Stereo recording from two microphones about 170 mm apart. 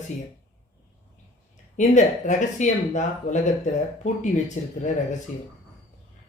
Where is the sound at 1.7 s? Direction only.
45° left (ahead or behind).